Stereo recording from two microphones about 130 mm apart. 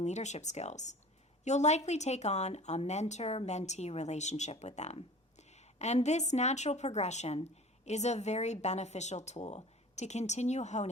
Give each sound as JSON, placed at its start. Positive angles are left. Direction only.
{"t": 0.0, "sound": "speech", "side_deg": 60}